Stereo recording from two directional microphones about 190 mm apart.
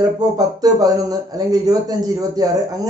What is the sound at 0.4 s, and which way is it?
Speech, 20° right (ahead or behind).